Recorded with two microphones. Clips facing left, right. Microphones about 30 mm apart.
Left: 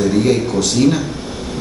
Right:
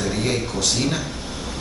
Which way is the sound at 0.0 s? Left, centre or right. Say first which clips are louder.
Left 9 dB; centre.